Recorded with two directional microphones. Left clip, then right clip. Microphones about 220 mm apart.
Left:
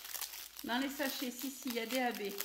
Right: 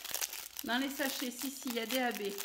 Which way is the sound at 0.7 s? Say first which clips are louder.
Right 2 dB; 20° right (ahead or behind).